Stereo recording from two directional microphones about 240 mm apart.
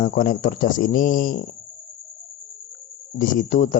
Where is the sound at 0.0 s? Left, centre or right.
Left.